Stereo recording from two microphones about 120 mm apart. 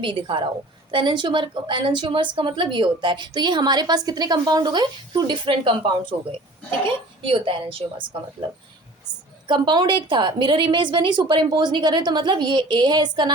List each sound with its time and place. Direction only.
0.0 s a woman's voice: 40° right (ahead or behind)
9.5 s a woman's voice: 40° right (ahead or behind)